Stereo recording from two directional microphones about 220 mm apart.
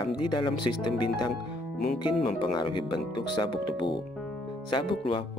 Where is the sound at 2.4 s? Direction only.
20° left (ahead or behind).